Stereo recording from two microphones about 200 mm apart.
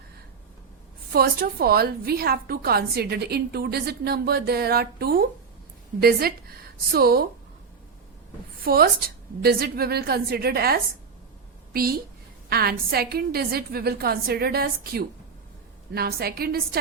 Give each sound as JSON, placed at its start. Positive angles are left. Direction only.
{"t": 1.1, "sound": "a woman's voice", "side_deg": -50}
{"t": 8.6, "sound": "a woman's voice", "side_deg": -50}